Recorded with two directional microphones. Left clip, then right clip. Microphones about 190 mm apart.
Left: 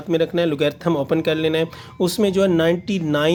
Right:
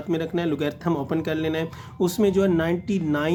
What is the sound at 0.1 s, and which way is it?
Speech, 40° left (ahead or behind).